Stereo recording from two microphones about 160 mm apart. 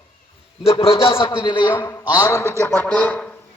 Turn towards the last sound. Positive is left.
turn(degrees=10)  # may be behind; listen again after turning